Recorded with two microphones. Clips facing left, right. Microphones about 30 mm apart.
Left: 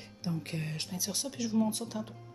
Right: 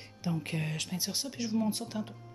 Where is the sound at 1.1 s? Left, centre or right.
Right.